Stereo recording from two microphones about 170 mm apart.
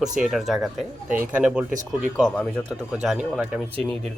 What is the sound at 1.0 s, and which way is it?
Speech, 55° right (ahead or behind).